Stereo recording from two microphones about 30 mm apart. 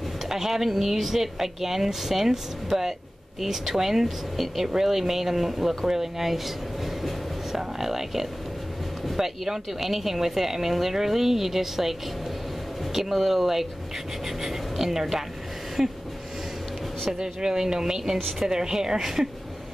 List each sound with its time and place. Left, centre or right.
0.3 s a woman's voice: centre
17.1 s a woman's voice: right